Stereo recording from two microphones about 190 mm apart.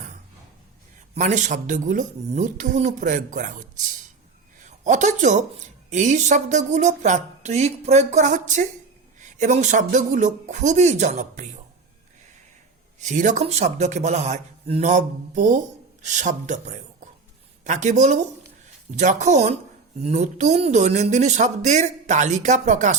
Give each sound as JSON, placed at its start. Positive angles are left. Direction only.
{"t": 1.1, "sound": "a woman's voice", "side_deg": -40}
{"t": 13.0, "sound": "speech", "side_deg": -40}